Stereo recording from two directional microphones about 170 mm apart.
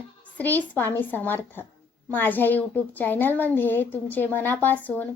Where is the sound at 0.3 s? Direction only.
10° left (ahead or behind).